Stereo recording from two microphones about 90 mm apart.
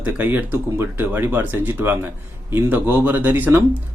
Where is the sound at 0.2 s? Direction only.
20° right (ahead or behind).